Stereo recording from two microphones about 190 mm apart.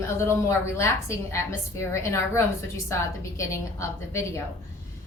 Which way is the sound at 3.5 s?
15° left (ahead or behind).